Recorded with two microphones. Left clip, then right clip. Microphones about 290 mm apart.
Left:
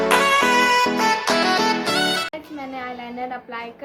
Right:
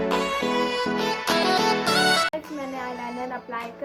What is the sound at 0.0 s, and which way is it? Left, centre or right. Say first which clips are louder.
Music: left 8 dB; left.